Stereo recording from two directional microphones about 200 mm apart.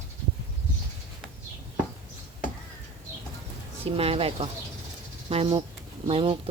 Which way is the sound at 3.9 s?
30° right (ahead or behind).